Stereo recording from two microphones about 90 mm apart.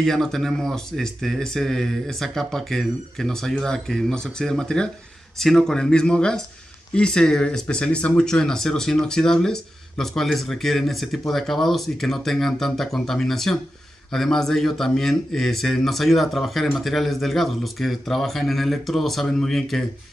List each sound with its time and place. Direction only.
0.0 s speech: 5° left (ahead or behind)